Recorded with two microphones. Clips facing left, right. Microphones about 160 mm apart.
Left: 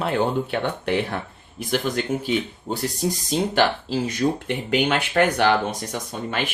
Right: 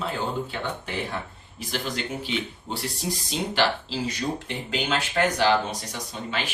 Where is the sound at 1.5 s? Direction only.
50° left (ahead or behind).